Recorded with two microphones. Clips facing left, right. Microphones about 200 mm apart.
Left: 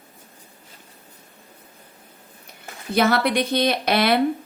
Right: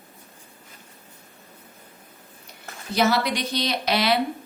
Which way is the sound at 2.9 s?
55° left (ahead or behind).